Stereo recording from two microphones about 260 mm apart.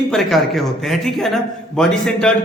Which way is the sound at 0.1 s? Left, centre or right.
Centre.